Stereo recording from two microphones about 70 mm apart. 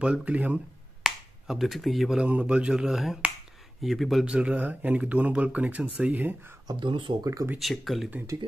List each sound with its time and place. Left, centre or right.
0.0 s speech: centre
1.0 s finger snapping: centre
2.2 s speech: centre
4.2 s speech: centre
6.7 s speech: right
7.5 s speech: centre